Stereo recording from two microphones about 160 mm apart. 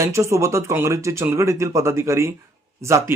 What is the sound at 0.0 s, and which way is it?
Speech, 20° right (ahead or behind).